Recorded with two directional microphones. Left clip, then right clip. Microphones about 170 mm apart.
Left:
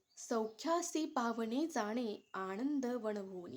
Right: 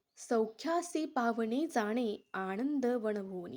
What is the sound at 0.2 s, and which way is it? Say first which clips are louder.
A woman's voice: right 6 dB; 20° right (ahead or behind).